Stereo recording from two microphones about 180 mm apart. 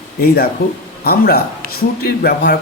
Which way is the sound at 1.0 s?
60° left (ahead or behind).